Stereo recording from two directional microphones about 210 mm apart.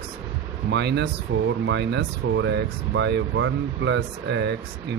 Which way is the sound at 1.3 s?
75° right (ahead or behind).